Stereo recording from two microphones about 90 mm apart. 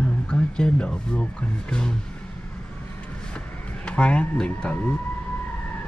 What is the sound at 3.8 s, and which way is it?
Speech, 15° left (ahead or behind).